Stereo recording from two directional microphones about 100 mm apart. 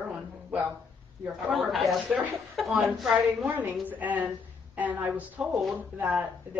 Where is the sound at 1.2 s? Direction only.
Centre (ahead or behind).